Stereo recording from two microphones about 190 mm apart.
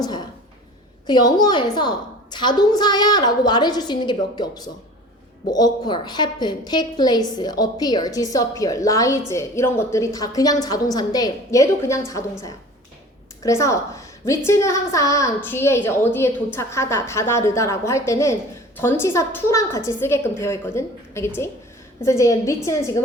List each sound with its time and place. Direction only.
1.0 s a woman's voice: 20° left (ahead or behind)
13.4 s a woman's voice: 15° left (ahead or behind)